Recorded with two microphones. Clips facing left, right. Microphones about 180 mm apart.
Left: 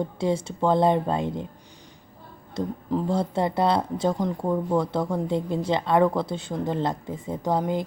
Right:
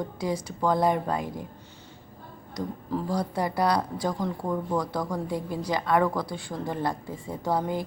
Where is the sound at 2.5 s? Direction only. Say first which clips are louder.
Left 4 dB; 20° left (ahead or behind).